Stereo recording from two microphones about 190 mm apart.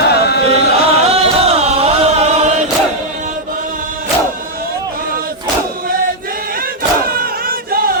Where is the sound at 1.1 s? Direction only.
30° right (ahead or behind).